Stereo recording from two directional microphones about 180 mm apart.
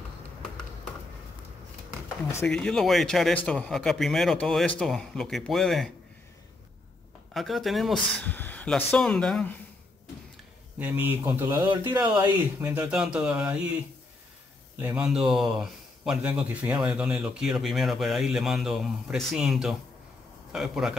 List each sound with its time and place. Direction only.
2.3 s speech: 5° left (ahead or behind)
7.3 s speech: centre (ahead or behind)
10.8 s speech: 10° right (ahead or behind)
12.5 s speech: 10° right (ahead or behind)
14.8 s speech: 10° right (ahead or behind)